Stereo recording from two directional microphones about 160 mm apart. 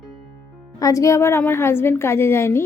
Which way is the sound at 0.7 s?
20° left (ahead or behind).